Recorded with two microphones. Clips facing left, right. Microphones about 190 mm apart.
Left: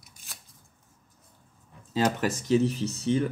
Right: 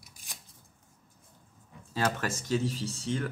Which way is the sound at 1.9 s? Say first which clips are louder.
Left 5 dB; 15° left (ahead or behind).